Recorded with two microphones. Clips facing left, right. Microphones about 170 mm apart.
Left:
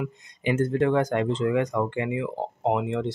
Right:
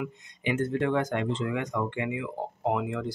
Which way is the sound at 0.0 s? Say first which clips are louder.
Left 3 dB; 40° left (ahead or behind).